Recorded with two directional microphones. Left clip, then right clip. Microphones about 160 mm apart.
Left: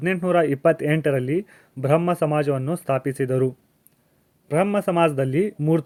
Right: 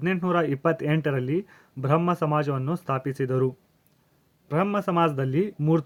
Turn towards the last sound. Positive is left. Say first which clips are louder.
# left 3 dB
turn(degrees=20)  # may be behind; listen again after turning